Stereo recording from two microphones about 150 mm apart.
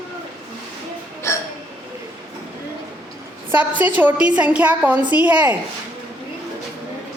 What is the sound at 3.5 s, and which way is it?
A woman's voice, 10° right (ahead or behind).